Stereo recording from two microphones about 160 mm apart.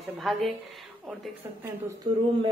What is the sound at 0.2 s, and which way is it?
Speech, centre (ahead or behind).